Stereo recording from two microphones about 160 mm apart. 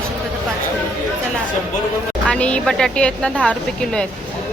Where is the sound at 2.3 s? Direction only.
5° left (ahead or behind).